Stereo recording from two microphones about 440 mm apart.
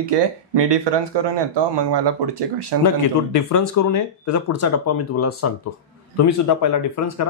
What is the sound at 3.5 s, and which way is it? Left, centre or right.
Speech, left.